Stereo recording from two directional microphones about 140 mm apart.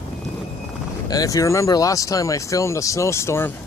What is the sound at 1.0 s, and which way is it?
Speech, 25° left (ahead or behind).